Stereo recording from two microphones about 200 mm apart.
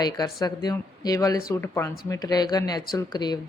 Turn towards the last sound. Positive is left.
turn(degrees=20)  # may be behind; listen again after turning